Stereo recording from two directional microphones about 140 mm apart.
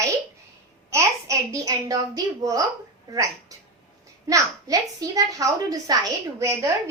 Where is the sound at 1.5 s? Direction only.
25° right (ahead or behind).